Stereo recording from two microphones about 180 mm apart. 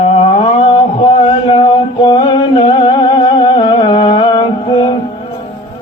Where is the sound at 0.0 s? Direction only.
35° left (ahead or behind).